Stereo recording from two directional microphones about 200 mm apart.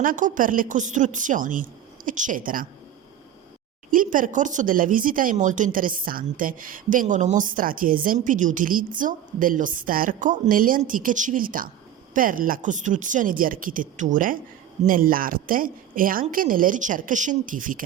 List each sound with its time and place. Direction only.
0.0 s a woman's voice: 40° right (ahead or behind)
3.9 s speech: 40° right (ahead or behind)